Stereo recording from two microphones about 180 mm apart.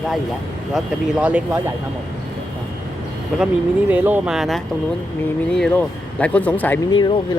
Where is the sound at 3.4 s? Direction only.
10° right (ahead or behind); by 6.8 s 10° left (ahead or behind).